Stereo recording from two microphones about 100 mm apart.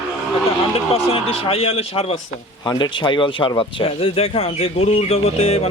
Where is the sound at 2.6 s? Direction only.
45° left (ahead or behind).